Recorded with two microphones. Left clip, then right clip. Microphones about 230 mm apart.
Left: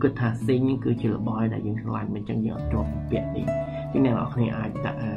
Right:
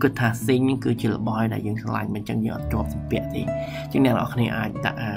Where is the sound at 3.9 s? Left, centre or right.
Centre.